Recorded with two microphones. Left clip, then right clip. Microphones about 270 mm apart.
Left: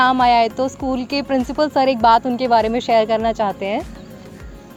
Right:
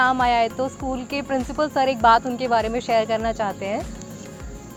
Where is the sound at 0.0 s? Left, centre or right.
Left.